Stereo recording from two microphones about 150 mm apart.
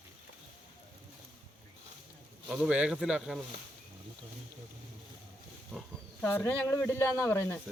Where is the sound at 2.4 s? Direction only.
5° right (ahead or behind).